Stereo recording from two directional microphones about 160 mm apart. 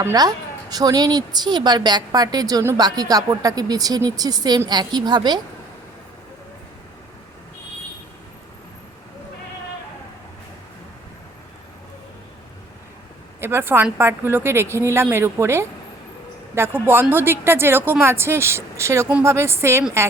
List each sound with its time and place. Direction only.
0.0 s a woman's voice: 25° right (ahead or behind)
13.4 s a woman's voice: 15° right (ahead or behind)